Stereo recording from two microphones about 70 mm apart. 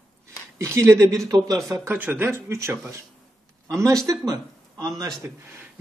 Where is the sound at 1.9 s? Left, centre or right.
Right.